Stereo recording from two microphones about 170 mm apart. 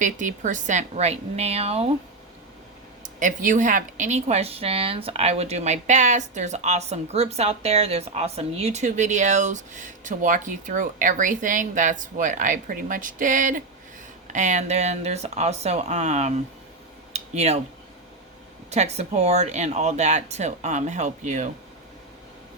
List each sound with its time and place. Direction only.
0.0 s speech: 50° right (ahead or behind)
3.0 s speech: 50° right (ahead or behind)
17.1 s a sound: 40° right (ahead or behind)
18.7 s speech: 40° right (ahead or behind)